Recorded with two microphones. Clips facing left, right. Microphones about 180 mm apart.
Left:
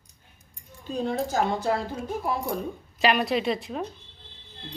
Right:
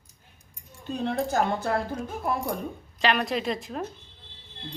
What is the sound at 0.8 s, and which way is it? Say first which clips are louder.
Speech: even; 60° right (ahead or behind).